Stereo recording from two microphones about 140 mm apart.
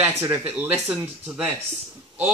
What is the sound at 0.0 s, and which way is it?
Speech, 20° right (ahead or behind).